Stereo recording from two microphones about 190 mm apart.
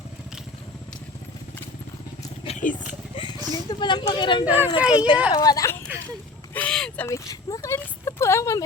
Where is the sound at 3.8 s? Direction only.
25° left (ahead or behind).